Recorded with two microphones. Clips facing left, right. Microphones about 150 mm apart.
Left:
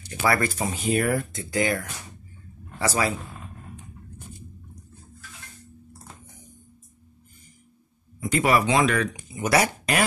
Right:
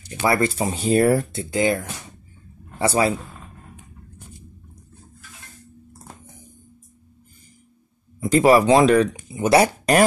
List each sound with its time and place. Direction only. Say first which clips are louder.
0.2 s speech: right 4 dB; 25° right (ahead or behind)
8.2 s speech: right 7 dB; 30° right (ahead or behind)